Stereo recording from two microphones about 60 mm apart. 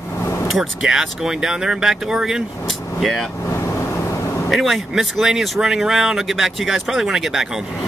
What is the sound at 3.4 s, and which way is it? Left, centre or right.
Vehicle, left.